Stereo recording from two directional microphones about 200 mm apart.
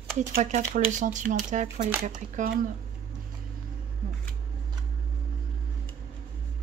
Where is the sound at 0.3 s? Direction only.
35° right (ahead or behind).